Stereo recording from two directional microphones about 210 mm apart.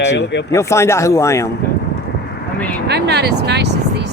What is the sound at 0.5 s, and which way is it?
Speech, 15° left (ahead or behind).